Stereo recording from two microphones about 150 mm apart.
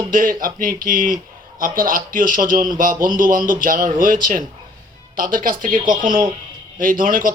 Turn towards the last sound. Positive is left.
turn(degrees=-65)  # may be behind; listen again after turning